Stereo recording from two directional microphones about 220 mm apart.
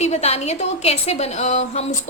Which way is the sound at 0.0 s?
30° left (ahead or behind).